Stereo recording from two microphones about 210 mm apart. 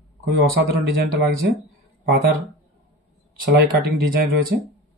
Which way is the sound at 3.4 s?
45° right (ahead or behind).